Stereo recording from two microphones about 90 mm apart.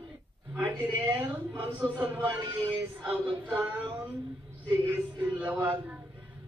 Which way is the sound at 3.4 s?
15° right (ahead or behind).